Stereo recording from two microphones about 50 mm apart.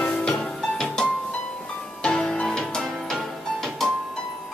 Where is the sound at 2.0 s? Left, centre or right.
Centre.